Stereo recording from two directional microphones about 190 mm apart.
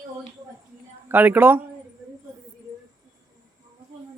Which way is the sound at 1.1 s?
10° right (ahead or behind).